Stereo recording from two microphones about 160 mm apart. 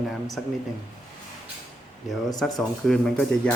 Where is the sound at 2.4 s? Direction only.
5° left (ahead or behind).